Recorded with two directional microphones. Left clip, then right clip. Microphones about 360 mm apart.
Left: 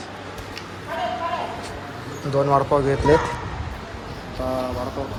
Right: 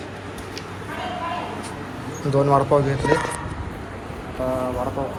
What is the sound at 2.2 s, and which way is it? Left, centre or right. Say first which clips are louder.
Speech: right 1 dB; centre.